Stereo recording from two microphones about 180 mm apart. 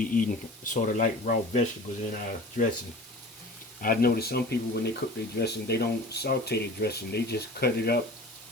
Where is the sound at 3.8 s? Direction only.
55° left (ahead or behind).